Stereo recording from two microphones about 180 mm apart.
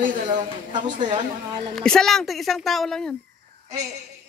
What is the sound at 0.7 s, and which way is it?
Speech, 45° right (ahead or behind).